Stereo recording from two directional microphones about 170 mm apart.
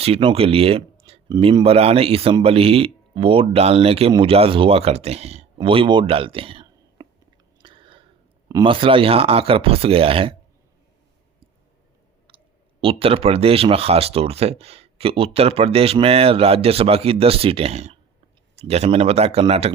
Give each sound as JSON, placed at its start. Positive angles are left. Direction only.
{"t": 0.0, "sound": "speech", "side_deg": -35}
{"t": 7.6, "sound": "chewing", "side_deg": -30}
{"t": 8.4, "sound": "speech", "side_deg": -25}
{"t": 12.3, "sound": "clicking", "side_deg": -30}
{"t": 12.8, "sound": "speech", "side_deg": -35}